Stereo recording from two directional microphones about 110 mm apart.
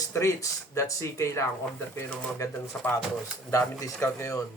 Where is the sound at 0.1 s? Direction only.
25° left (ahead or behind).